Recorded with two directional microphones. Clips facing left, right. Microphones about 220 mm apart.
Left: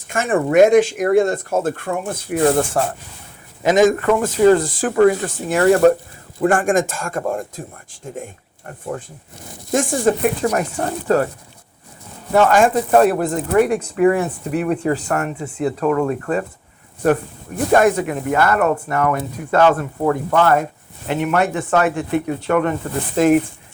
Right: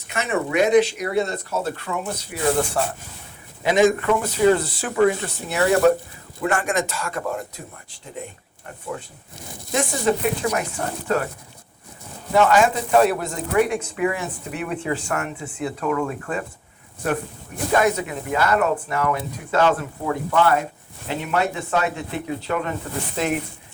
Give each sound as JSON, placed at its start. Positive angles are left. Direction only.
{"t": 0.1, "sound": "speech", "side_deg": 50}
{"t": 12.3, "sound": "speech", "side_deg": 50}
{"t": 17.7, "sound": "speech", "side_deg": 50}